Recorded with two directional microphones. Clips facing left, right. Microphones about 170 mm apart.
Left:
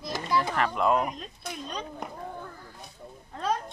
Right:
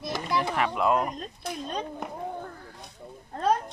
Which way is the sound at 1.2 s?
50° right (ahead or behind).